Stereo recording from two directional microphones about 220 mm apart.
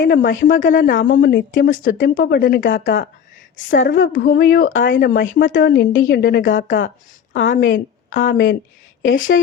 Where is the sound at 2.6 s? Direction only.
55° left (ahead or behind).